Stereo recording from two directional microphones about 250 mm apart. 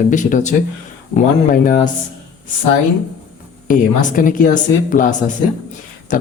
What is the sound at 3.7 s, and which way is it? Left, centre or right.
Speech, left.